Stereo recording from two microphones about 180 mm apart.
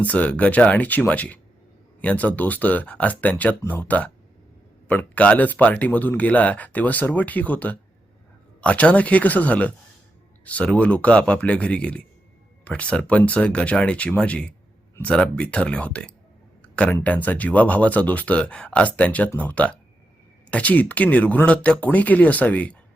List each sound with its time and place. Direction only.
0.1 s speech: 10° left (ahead or behind)